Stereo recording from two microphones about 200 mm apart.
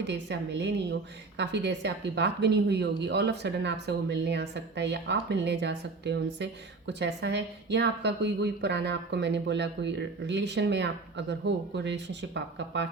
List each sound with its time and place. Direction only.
0.0 s speech: 60° right (ahead or behind)